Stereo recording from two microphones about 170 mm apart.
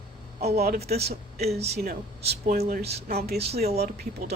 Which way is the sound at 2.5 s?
55° right (ahead or behind).